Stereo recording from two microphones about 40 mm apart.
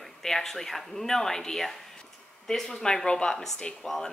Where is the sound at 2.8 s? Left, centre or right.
Centre.